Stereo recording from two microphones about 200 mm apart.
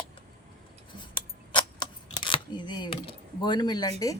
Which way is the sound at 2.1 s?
25° left (ahead or behind).